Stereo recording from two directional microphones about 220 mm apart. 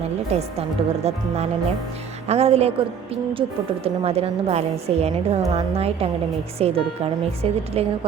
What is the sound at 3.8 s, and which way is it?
A woman's voice, 25° right (ahead or behind).